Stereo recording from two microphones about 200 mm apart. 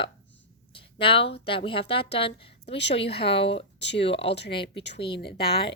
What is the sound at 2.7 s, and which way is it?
Speech, 60° left (ahead or behind).